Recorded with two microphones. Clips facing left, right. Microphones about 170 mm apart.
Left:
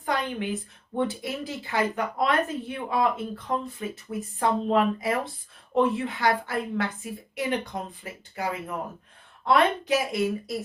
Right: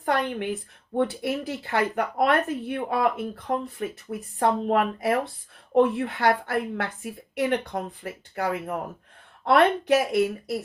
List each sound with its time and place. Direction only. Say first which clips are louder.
0.0 s a woman's voice: right 3 dB; 60° right (ahead or behind)